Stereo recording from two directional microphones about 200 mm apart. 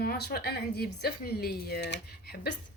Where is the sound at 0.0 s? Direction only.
50° left (ahead or behind).